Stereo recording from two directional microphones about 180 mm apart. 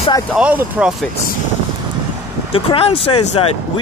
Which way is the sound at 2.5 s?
30° left (ahead or behind).